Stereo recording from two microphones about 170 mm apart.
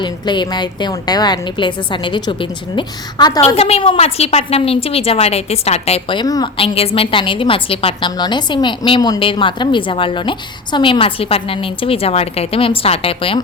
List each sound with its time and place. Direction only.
0.0 s a woman's voice: 25° left (ahead or behind)
3.4 s a woman's voice: 35° left (ahead or behind)